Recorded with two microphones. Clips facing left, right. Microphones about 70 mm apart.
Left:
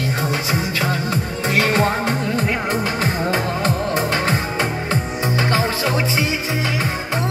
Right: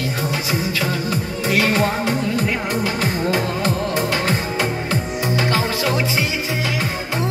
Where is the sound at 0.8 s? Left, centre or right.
Left.